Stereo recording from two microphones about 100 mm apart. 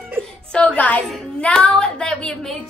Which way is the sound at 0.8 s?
15° left (ahead or behind).